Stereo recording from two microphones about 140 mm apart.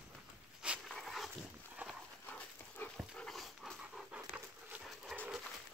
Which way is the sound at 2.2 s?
15° left (ahead or behind).